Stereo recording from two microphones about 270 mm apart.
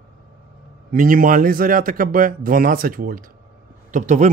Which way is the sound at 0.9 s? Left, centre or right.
Right.